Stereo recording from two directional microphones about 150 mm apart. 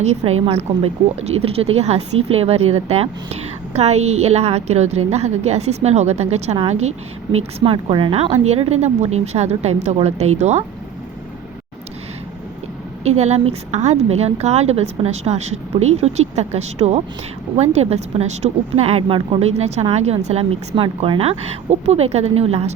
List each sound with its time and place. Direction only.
0.0 s speech: 45° right (ahead or behind)
13.1 s speech: 45° right (ahead or behind)